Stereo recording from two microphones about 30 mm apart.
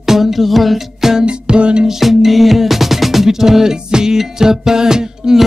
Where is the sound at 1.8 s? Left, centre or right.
Centre.